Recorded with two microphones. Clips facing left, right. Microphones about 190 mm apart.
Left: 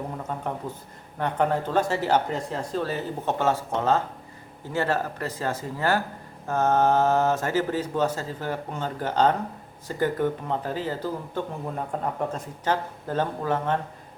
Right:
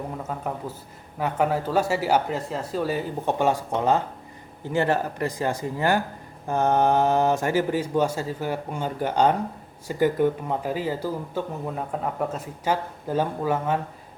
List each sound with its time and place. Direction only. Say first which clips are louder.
0.2 s speech: right 1 dB; 5° right (ahead or behind)